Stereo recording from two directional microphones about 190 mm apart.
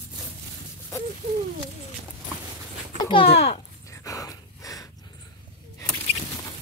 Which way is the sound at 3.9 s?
15° left (ahead or behind).